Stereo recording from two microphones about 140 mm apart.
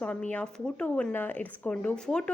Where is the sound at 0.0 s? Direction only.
10° left (ahead or behind).